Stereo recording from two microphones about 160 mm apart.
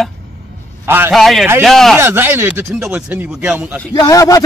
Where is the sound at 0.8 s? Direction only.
15° right (ahead or behind).